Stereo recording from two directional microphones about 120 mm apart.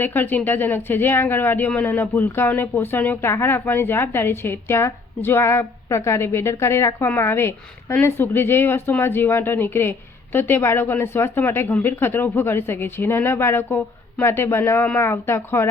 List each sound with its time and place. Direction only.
0.0 s a woman's voice: 15° left (ahead or behind)